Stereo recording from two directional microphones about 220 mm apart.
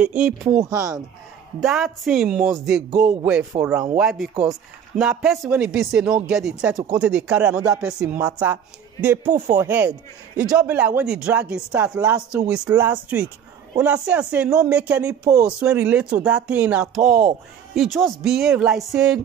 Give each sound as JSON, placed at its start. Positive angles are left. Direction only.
{"t": 0.0, "sound": "speech", "side_deg": -5}
{"t": 0.7, "sound": "a man's voice", "side_deg": -15}
{"t": 1.6, "sound": "a man's voice", "side_deg": 0}